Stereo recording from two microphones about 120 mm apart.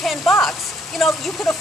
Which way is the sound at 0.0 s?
Centre (ahead or behind).